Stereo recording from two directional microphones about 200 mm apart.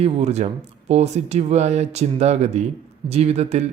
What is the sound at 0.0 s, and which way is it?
Speech, 30° right (ahead or behind).